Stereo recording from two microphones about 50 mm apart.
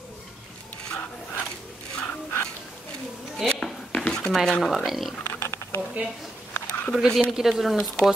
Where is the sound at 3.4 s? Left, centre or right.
Centre.